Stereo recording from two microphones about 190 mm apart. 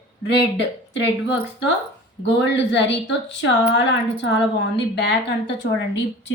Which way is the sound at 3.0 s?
70° left (ahead or behind).